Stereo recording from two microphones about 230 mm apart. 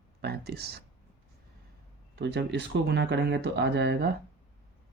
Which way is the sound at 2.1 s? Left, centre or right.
Right.